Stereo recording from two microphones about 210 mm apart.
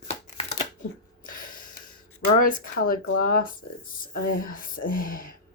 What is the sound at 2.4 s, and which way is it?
Speech, 45° left (ahead or behind).